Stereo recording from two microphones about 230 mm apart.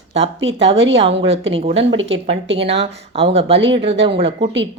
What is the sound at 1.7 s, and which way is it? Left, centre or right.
Speech, right.